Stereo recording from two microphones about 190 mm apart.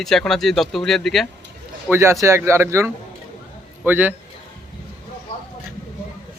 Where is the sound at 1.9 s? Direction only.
15° right (ahead or behind).